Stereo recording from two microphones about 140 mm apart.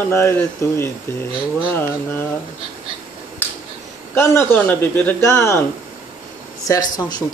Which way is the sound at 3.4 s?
15° left (ahead or behind).